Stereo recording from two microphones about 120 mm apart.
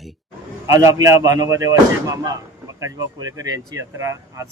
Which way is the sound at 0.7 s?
25° right (ahead or behind).